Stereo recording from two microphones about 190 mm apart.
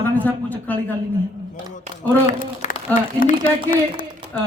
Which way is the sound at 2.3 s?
40° left (ahead or behind).